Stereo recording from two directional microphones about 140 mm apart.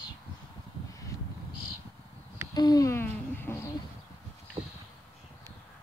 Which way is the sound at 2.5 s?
25° left (ahead or behind).